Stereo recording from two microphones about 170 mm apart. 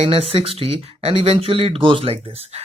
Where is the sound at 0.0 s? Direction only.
35° right (ahead or behind).